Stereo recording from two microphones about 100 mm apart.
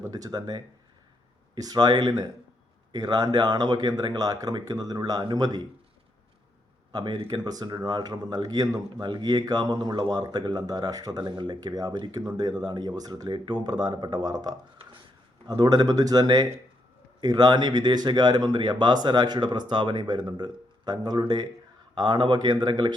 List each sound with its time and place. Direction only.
0.0 s speech: 40° right (ahead or behind)
6.9 s speech: 50° right (ahead or behind)
9.0 s speech: 50° right (ahead or behind)